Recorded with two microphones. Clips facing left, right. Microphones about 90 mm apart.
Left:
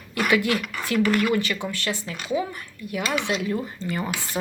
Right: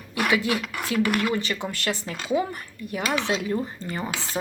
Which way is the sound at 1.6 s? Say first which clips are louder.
Even; 40° right (ahead or behind).